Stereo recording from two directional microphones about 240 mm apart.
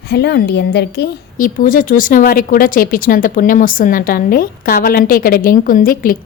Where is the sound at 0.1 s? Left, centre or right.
Left.